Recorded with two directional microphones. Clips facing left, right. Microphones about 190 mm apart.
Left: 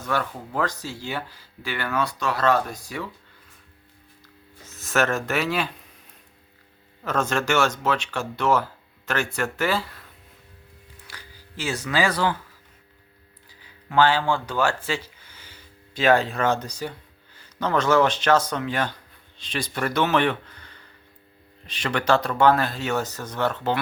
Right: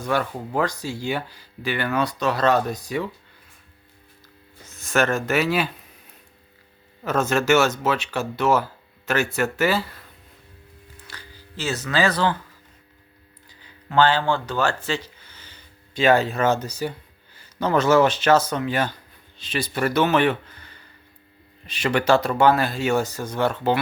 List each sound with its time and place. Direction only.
0.0 s speech: 15° right (ahead or behind)
4.6 s speech: centre (ahead or behind)
7.0 s speech: 5° right (ahead or behind)
11.0 s a sound: 10° left (ahead or behind)
13.5 s a sound: 10° left (ahead or behind)
16.0 s speech: centre (ahead or behind)
21.7 s speech: 10° right (ahead or behind)